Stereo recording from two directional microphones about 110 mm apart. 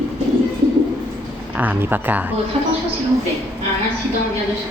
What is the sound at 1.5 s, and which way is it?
Speech, 15° right (ahead or behind).